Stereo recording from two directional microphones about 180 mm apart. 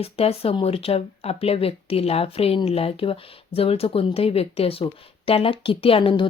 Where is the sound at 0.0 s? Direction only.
35° left (ahead or behind).